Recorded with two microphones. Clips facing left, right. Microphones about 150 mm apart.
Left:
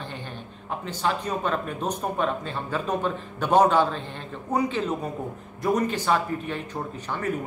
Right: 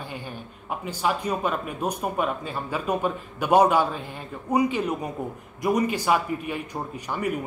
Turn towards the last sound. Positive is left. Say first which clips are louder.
# right 1 dB
turn(degrees=-10)  # may be behind; listen again after turning